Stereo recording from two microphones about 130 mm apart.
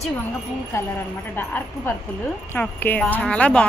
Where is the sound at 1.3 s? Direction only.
15° left (ahead or behind).